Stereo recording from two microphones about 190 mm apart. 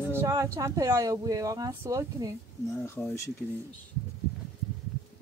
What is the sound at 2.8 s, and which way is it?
Speech, 10° left (ahead or behind).